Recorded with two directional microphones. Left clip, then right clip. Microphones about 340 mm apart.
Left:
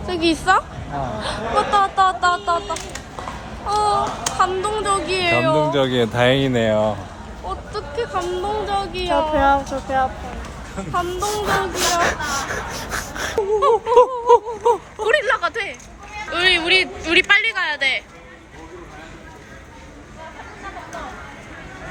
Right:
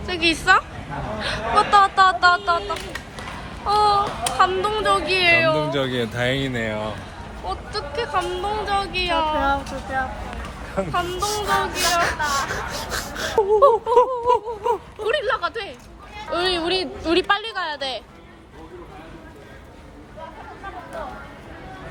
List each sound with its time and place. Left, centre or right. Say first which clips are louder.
0.1 s speech: even; centre
3.7 s speech: right 1 dB; centre
6.7 s speech: left 9 dB; left
7.4 s speech: even; centre
10.9 s speech: left 4 dB; centre
12.7 s a sound: left 1 dB; centre
13.3 s speech: right 2 dB; centre
14.3 s a sound: left 5 dB; centre
15.0 s speech: left 4 dB; centre